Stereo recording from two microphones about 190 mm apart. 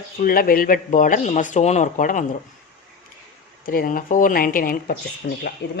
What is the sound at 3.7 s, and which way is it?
Speech, 50° left (ahead or behind).